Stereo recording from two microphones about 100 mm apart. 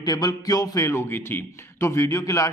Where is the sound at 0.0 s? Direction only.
40° left (ahead or behind).